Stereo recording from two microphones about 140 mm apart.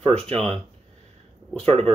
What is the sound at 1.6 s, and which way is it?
Speech, 45° right (ahead or behind).